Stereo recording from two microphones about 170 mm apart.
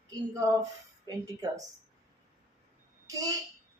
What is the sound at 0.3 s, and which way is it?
A woman's voice, 20° right (ahead or behind).